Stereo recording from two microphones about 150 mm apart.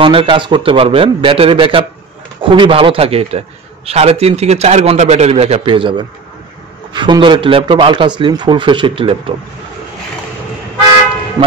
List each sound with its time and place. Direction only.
0.0 s a man's voice: 35° right (ahead or behind)
11.4 s speech: 25° right (ahead or behind)